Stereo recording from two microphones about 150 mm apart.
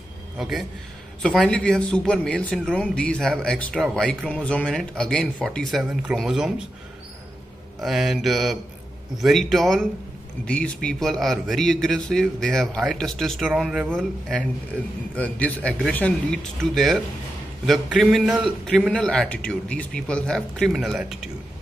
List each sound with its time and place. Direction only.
0.4 s a man's voice: centre (ahead or behind)
7.8 s a man's voice: centre (ahead or behind)